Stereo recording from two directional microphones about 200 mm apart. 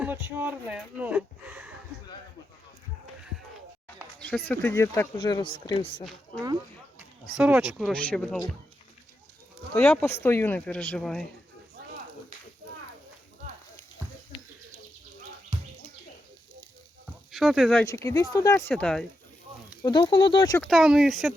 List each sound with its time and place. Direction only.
0.0 s speech: 10° right (ahead or behind)
4.3 s speech: 10° left (ahead or behind)
5.1 s speech: 25° left (ahead or behind)
7.3 s speech: 5° right (ahead or behind)
9.7 s speech: 10° left (ahead or behind)
17.3 s speech: centre (ahead or behind)
17.8 s speech: 15° left (ahead or behind)
18.7 s speech: 5° left (ahead or behind)
19.8 s speech: 25° left (ahead or behind)
20.6 s speech: centre (ahead or behind)